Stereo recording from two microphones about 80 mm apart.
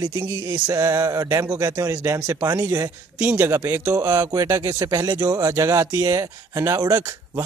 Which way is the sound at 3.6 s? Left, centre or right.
Right.